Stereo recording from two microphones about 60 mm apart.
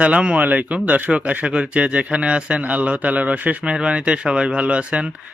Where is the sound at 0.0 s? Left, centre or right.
Centre.